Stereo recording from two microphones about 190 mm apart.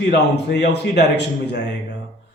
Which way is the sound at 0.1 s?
65° left (ahead or behind).